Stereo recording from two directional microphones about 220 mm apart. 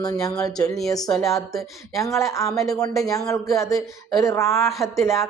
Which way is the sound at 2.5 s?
Centre (ahead or behind).